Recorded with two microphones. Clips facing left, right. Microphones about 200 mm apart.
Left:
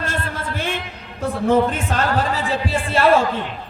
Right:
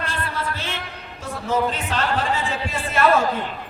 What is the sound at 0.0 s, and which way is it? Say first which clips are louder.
Music: left 2 dB; 50° left (ahead or behind).